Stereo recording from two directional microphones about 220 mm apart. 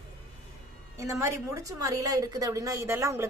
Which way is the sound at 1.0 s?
15° right (ahead or behind).